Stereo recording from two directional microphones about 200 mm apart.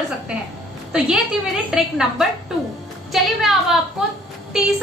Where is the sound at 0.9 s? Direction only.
5° right (ahead or behind).